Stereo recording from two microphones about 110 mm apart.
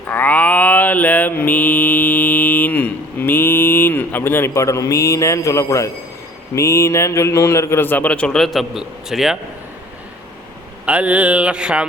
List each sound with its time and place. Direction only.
0.1 s mantra: 15° left (ahead or behind)
6.6 s a man's voice: 25° left (ahead or behind); by 9.4 s 5° right (ahead or behind)
10.8 s mantra: 10° right (ahead or behind)